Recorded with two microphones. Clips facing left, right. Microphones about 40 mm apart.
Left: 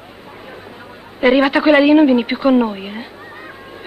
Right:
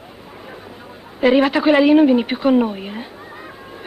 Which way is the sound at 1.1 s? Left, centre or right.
Left.